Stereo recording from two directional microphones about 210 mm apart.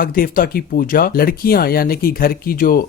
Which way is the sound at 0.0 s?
45° left (ahead or behind).